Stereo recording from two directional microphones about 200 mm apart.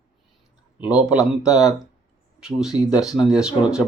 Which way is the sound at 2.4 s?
5° right (ahead or behind).